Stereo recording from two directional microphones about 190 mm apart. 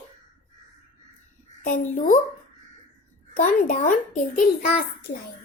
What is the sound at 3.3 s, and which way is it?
Speech, 45° left (ahead or behind).